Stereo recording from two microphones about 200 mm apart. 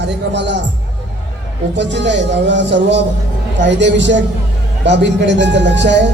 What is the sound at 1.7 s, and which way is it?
Speech, 60° right (ahead or behind).